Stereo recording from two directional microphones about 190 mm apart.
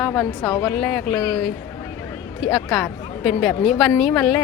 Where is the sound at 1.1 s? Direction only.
20° left (ahead or behind).